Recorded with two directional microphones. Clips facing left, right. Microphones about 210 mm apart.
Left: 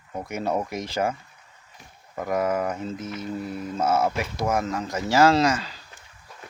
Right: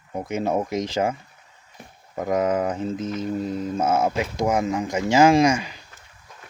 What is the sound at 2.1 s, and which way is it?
Speech, 20° right (ahead or behind).